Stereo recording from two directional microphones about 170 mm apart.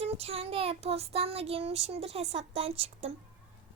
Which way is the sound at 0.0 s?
35° right (ahead or behind).